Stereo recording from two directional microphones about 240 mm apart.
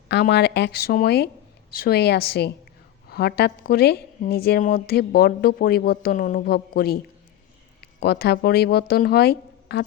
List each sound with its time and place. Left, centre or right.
0.1 s speech: left